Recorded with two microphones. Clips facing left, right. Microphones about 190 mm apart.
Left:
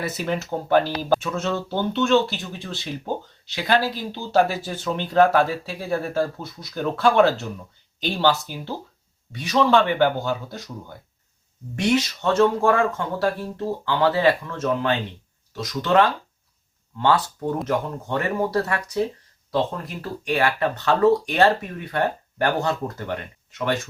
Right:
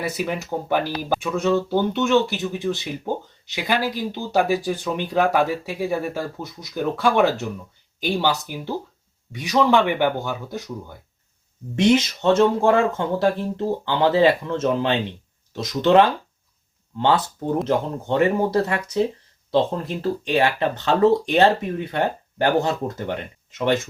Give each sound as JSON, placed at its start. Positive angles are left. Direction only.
{"t": 0.0, "sound": "speech", "side_deg": -10}
{"t": 17.7, "sound": "speech", "side_deg": -20}